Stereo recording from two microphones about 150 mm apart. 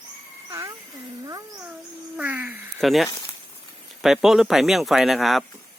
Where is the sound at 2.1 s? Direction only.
10° right (ahead or behind).